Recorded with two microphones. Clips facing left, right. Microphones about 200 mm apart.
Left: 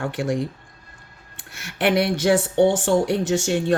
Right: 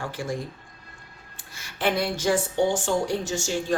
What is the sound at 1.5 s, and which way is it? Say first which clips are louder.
Speech: left 5 dB; 70° left (ahead or behind).